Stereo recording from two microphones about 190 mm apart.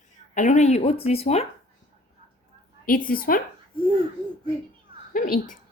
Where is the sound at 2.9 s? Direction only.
50° left (ahead or behind).